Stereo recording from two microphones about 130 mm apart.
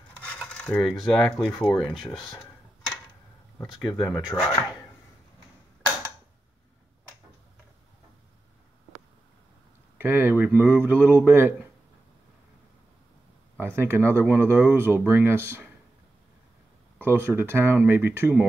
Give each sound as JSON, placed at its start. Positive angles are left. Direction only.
{"t": 0.4, "sound": "coin", "side_deg": 10}
{"t": 1.5, "sound": "speech", "side_deg": 10}
{"t": 3.8, "sound": "speech", "side_deg": 35}
{"t": 9.9, "sound": "speech", "side_deg": -15}
{"t": 13.6, "sound": "speech", "side_deg": -20}
{"t": 17.0, "sound": "speech", "side_deg": -15}